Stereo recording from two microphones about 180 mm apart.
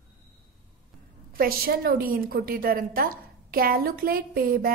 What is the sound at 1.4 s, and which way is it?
A woman's voice, 55° right (ahead or behind).